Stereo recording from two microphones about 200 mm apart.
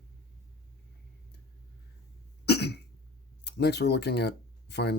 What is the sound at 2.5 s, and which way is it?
Cough, 55° left (ahead or behind).